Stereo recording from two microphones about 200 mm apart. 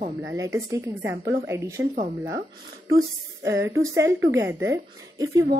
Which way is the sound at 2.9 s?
15° right (ahead or behind).